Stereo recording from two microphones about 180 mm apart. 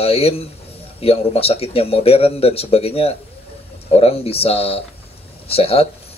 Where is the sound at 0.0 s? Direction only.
35° left (ahead or behind).